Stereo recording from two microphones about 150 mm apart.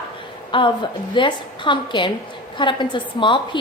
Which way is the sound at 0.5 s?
30° left (ahead or behind).